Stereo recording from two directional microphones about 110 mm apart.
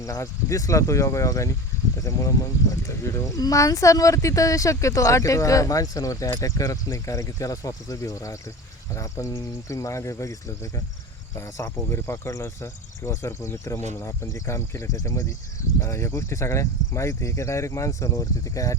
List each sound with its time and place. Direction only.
0.0 s speech: 30° left (ahead or behind)
1.7 s a sound: 30° left (ahead or behind)
2.0 s speech: 30° left (ahead or behind)